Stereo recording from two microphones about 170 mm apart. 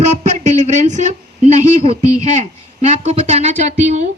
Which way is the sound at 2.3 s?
40° right (ahead or behind).